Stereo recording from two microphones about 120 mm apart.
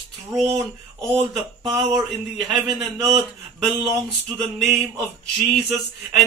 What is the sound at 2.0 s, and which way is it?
A man's voice, centre (ahead or behind).